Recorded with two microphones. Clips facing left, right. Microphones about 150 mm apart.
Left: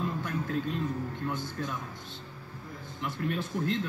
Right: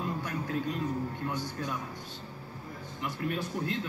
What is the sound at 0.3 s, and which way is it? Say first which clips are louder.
Music: left 1 dB; 15° right (ahead or behind).